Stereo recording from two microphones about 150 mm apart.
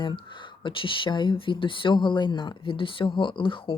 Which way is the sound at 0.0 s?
30° left (ahead or behind).